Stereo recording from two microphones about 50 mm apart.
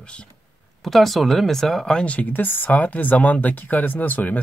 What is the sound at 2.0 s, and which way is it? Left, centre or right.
Speech, left.